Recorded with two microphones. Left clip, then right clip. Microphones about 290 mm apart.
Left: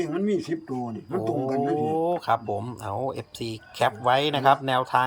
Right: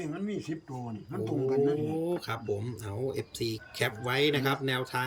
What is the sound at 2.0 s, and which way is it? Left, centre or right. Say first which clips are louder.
Speech: left 10 dB; centre.